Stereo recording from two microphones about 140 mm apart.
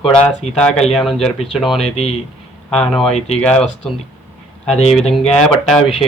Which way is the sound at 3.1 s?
50° left (ahead or behind).